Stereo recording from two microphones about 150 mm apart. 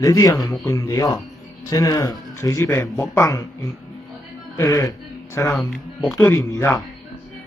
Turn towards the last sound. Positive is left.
turn(degrees=20)  # may be behind; listen again after turning